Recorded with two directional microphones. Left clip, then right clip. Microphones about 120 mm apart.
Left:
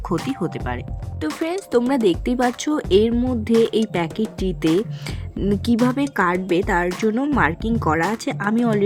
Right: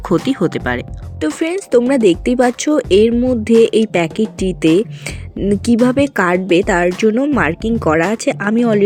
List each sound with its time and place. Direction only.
0.3 s speech: 35° right (ahead or behind)
1.4 s a woman's voice: 30° right (ahead or behind)
5.4 s speech: centre (ahead or behind)
5.8 s a woman's voice: 30° right (ahead or behind)